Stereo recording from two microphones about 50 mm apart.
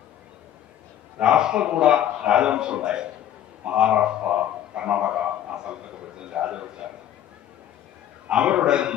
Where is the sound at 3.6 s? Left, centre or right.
Right.